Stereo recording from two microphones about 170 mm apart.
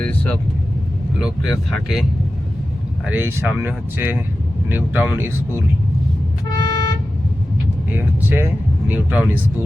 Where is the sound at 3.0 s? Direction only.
10° right (ahead or behind).